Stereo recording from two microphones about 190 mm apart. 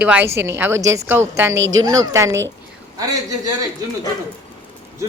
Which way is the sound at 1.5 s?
70° right (ahead or behind).